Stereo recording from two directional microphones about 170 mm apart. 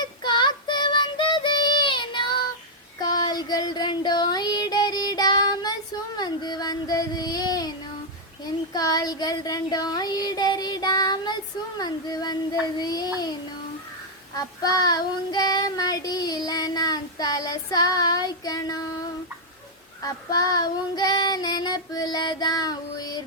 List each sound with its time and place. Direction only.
0.0 s child singing: 25° left (ahead or behind)
8.7 s child singing: 20° left (ahead or behind)
14.3 s child singing: 25° left (ahead or behind)
20.0 s child singing: 20° left (ahead or behind)